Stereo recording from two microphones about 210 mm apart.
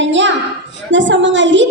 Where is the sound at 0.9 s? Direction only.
60° right (ahead or behind).